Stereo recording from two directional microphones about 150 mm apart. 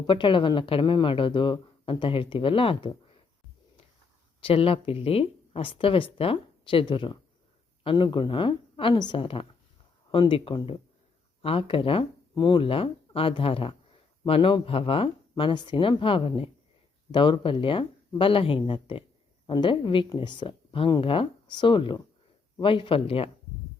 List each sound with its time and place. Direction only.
0.1 s speech: 35° left (ahead or behind)
4.4 s speech: 40° left (ahead or behind)